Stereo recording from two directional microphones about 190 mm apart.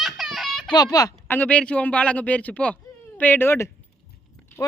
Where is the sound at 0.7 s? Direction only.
20° left (ahead or behind).